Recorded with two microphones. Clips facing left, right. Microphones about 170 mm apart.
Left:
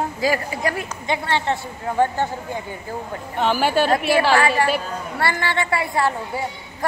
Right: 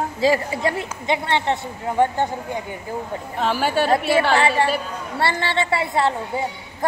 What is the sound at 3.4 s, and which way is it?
Speech, centre (ahead or behind).